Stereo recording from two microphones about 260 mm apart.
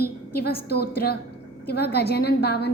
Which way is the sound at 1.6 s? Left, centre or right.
Left.